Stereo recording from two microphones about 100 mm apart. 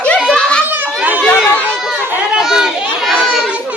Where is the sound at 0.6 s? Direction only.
20° right (ahead or behind).